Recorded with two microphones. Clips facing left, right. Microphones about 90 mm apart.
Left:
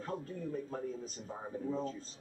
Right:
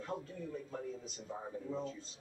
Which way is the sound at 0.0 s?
45° left (ahead or behind).